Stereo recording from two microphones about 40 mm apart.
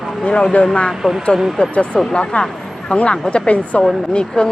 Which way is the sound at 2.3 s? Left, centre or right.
Left.